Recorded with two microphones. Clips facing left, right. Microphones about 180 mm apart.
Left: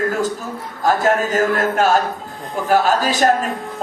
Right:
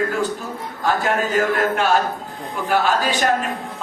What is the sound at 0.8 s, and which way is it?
A man's voice, 40° left (ahead or behind).